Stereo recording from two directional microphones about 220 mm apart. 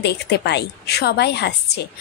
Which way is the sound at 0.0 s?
50° left (ahead or behind).